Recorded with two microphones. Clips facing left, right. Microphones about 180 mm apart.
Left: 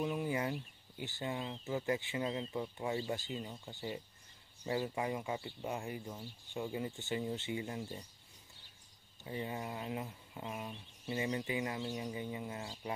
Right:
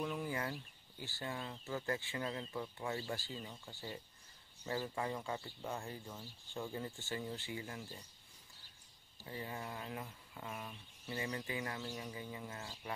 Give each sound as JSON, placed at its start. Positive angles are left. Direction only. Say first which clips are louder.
{"t": 0.0, "sound": "speech", "louder": "left 4 dB", "side_deg": 20}
{"t": 9.2, "sound": "speech", "louder": "left 4 dB", "side_deg": 20}